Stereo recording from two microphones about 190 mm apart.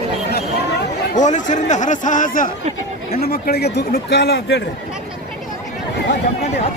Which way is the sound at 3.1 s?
55° left (ahead or behind).